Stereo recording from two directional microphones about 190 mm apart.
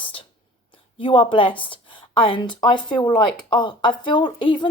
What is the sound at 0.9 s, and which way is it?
A woman's voice, 25° left (ahead or behind).